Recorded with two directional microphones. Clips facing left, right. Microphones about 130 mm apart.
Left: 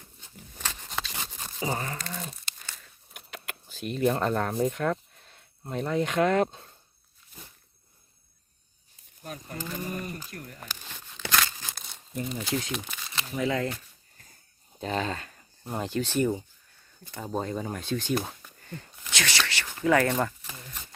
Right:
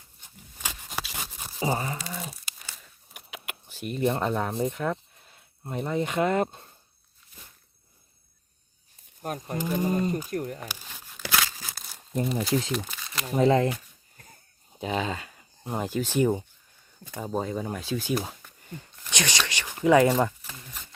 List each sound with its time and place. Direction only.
0.6 s a sound: 10° right (ahead or behind)
9.2 s speech: 50° right (ahead or behind)
9.6 s speech: 15° right (ahead or behind)
10.7 s crumpling: 10° right (ahead or behind)
12.3 s speech: centre (ahead or behind)
12.7 s a sound: centre (ahead or behind)
13.3 s speech: 30° right (ahead or behind)
14.7 s speech: 5° right (ahead or behind)
19.1 s speech: 15° right (ahead or behind)
20.4 s a sound: centre (ahead or behind)